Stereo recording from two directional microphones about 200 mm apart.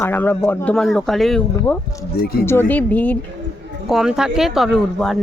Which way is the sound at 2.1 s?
50° left (ahead or behind).